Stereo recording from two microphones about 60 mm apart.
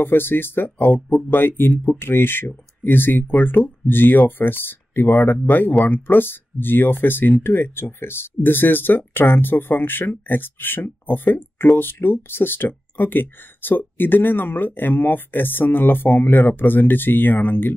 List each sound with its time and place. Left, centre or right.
0.0 s speech: left